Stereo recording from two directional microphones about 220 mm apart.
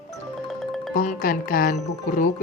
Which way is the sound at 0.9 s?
40° left (ahead or behind).